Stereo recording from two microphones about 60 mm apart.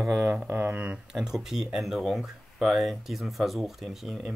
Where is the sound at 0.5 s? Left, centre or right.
Right.